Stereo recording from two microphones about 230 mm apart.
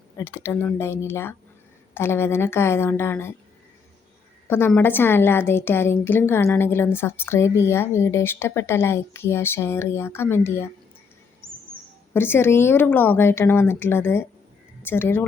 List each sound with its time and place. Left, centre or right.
0.2 s a woman's voice: centre
4.4 s a woman's voice: centre
11.4 s bird: right
12.1 s a woman's voice: centre